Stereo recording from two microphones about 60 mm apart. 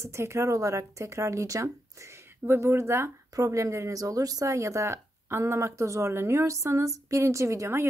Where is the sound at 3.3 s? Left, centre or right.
Right.